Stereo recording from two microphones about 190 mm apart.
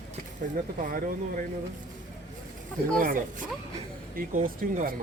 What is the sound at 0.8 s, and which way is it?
Speech, 45° right (ahead or behind).